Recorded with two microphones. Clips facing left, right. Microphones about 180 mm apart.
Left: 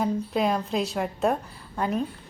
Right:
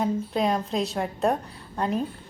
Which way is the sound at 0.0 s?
Centre (ahead or behind).